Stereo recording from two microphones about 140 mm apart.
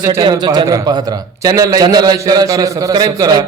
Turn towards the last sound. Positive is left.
turn(degrees=-25)  # may be behind; listen again after turning